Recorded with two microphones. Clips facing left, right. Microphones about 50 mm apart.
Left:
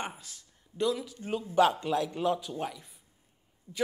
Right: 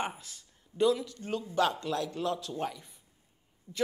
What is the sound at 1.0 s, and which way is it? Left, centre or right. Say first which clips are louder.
A man's voice: left 1 dB; centre.